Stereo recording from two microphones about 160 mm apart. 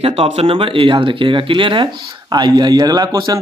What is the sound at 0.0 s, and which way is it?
Speech, 35° right (ahead or behind).